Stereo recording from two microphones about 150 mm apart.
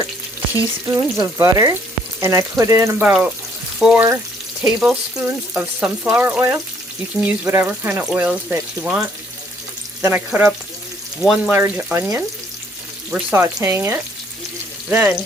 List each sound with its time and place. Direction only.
0.9 s speech: 20° right (ahead or behind)
11.2 s speech: 5° right (ahead or behind)
11.5 s speech: 15° right (ahead or behind)